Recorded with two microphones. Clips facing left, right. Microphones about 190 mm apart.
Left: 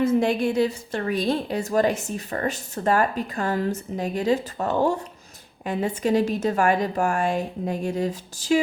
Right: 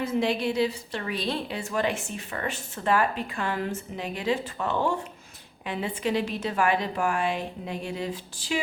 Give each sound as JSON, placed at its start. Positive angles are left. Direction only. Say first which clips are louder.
{"t": 0.0, "sound": "a woman's voice", "louder": "left 5 dB", "side_deg": 50}